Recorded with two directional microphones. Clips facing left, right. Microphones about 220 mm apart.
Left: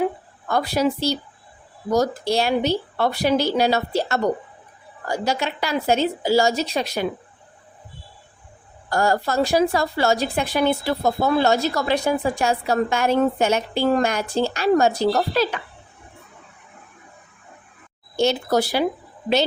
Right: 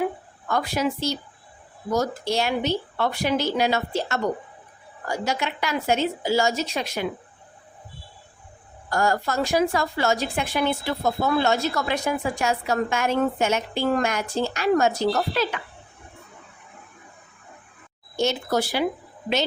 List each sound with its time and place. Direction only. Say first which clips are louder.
0.4 s speech: left 4 dB; 35° left (ahead or behind)
8.9 s speech: left 3 dB; 30° left (ahead or behind)
18.2 s speech: left 4 dB; 35° left (ahead or behind)